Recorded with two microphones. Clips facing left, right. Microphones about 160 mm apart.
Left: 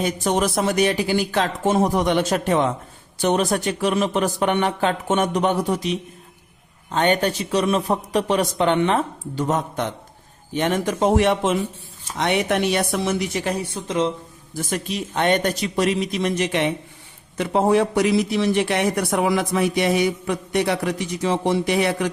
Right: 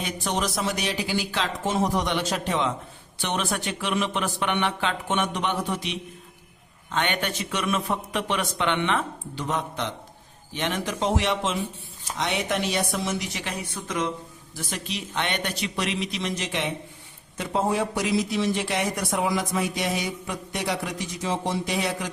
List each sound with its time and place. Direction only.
0.0 s a man's voice: 50° left (ahead or behind); by 14.1 s 25° left (ahead or behind)
14.5 s a man's voice: 50° left (ahead or behind)